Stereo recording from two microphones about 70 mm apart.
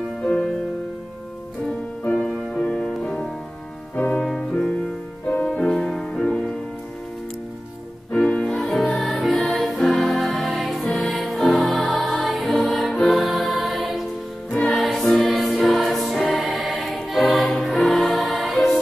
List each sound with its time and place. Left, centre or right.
0.2 s music: centre
2.0 s music: centre
3.9 s music: left
4.2 s music: centre
8.1 s music: centre
8.5 s music: centre